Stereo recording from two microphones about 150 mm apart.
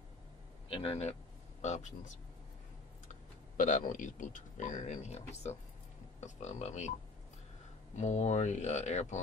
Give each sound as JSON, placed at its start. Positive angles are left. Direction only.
{"t": 0.7, "sound": "speech", "side_deg": 40}
{"t": 8.0, "sound": "speech", "side_deg": 50}